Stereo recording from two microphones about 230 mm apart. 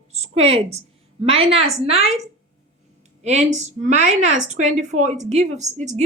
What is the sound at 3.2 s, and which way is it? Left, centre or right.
A woman's voice, right.